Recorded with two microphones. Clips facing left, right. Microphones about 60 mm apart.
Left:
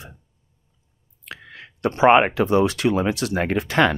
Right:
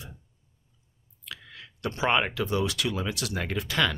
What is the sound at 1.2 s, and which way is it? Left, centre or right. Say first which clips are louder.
Speech: left 5 dB; left.